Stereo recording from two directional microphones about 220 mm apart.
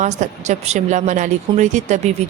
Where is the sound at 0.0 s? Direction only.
30° right (ahead or behind).